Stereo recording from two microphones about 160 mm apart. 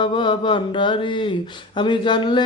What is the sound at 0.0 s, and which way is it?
Speech, 30° left (ahead or behind).